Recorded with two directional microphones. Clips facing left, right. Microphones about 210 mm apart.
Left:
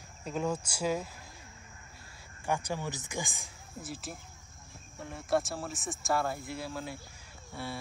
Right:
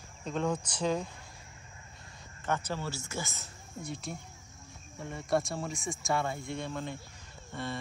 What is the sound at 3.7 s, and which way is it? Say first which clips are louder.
Speech: right 2 dB; 5° left (ahead or behind).